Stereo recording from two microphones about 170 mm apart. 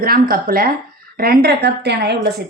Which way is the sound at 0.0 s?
60° right (ahead or behind).